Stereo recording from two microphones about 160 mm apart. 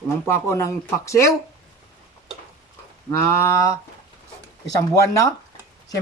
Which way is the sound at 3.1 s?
15° left (ahead or behind).